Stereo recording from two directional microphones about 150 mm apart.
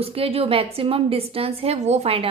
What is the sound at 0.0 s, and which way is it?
A woman's voice, 40° right (ahead or behind).